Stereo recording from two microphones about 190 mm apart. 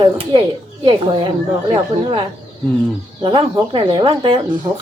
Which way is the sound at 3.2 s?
25° right (ahead or behind).